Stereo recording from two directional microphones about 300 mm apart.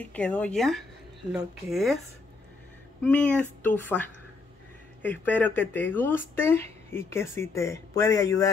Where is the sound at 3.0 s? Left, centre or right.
Centre.